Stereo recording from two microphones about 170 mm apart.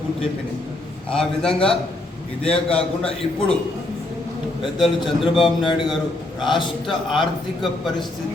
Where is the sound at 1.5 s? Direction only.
35° left (ahead or behind).